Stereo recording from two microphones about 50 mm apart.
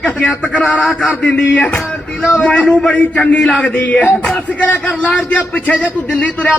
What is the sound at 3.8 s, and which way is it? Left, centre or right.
Speech, left.